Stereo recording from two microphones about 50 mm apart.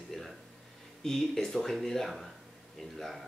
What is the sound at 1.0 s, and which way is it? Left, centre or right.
Speech, centre.